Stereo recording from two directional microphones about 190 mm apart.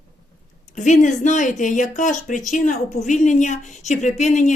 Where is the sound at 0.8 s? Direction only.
40° left (ahead or behind).